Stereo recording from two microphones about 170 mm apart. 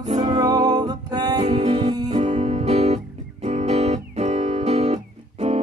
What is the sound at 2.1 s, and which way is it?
Music, 40° right (ahead or behind).